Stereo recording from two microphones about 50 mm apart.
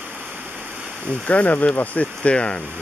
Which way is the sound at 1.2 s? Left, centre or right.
Left.